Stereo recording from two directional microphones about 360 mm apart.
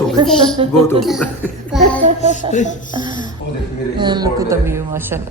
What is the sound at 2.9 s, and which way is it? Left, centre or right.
A woman's voice, centre.